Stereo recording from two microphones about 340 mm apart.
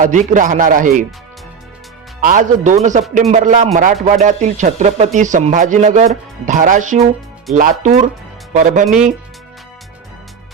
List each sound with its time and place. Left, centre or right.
0.0 s speech: right
2.2 s speech: right